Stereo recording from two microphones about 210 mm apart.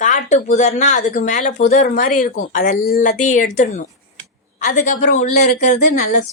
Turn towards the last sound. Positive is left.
turn(degrees=35)  # may be behind; listen again after turning